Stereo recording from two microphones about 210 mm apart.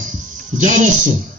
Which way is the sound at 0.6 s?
35° right (ahead or behind).